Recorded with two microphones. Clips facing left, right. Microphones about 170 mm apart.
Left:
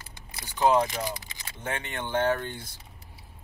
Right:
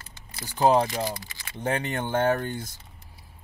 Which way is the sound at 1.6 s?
40° right (ahead or behind).